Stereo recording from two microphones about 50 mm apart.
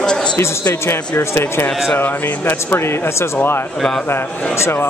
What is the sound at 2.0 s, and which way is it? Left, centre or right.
Speech, left.